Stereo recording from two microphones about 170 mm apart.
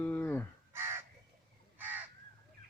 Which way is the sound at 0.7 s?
15° right (ahead or behind).